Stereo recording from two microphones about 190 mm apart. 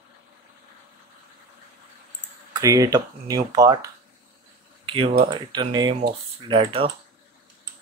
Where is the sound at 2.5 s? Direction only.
15° right (ahead or behind).